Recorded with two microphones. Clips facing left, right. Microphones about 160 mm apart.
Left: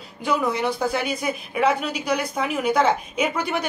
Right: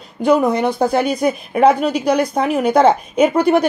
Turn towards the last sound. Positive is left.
turn(degrees=-50)  # may be behind; listen again after turning